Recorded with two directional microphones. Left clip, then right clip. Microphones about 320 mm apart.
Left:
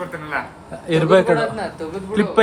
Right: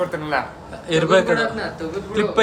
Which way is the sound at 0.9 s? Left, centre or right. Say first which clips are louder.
Left 2 dB; left.